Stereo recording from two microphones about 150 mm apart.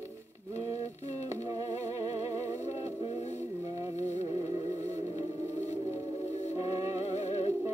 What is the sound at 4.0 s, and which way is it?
Music, 50° left (ahead or behind).